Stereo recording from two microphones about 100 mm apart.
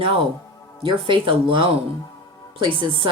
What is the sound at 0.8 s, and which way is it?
Speech, 55° right (ahead or behind).